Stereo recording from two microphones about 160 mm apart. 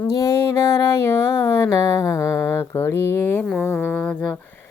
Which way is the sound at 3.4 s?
5° left (ahead or behind).